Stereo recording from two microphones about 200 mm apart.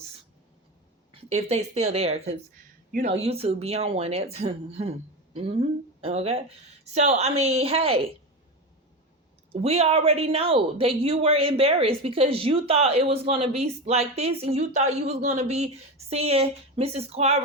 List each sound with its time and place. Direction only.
1.3 s a woman's voice: 35° right (ahead or behind)
9.5 s a woman's voice: 30° right (ahead or behind)